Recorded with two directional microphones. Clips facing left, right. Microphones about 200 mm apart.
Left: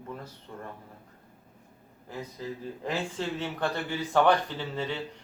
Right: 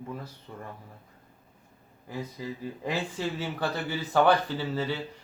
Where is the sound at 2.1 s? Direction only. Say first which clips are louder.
Right 1 dB; 10° right (ahead or behind).